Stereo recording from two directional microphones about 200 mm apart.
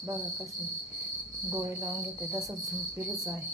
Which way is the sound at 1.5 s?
15° right (ahead or behind).